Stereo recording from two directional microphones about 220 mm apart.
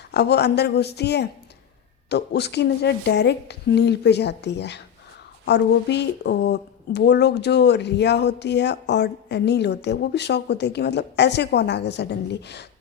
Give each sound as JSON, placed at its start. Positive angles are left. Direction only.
{"t": 0.1, "sound": "speech", "side_deg": 50}